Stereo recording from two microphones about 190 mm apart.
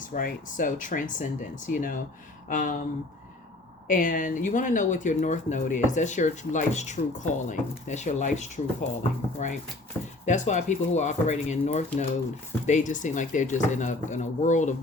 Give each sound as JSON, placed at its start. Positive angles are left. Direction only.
{"t": 0.0, "sound": "speech", "side_deg": 45}
{"t": 3.8, "sound": "speech", "side_deg": 45}